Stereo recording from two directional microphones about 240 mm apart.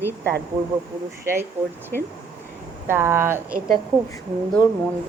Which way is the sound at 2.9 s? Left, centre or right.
Centre.